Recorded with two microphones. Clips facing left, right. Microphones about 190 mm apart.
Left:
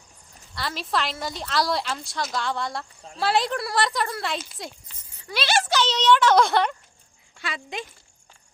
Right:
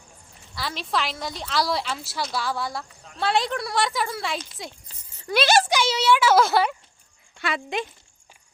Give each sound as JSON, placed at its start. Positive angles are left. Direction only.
{"t": 0.5, "sound": "a woman's voice", "side_deg": 0}
{"t": 5.3, "sound": "speech", "side_deg": -45}
{"t": 5.6, "sound": "a child's voice", "side_deg": -10}
{"t": 7.4, "sound": "speech", "side_deg": -65}